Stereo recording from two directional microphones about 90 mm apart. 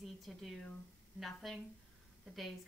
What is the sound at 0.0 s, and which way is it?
A woman's voice, centre (ahead or behind).